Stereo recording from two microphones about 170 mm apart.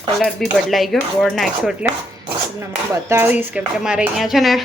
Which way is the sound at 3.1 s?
10° right (ahead or behind).